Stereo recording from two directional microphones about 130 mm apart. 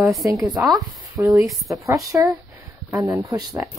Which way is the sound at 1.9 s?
25° right (ahead or behind).